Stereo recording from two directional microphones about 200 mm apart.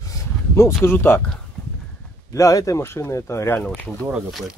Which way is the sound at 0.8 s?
10° left (ahead or behind).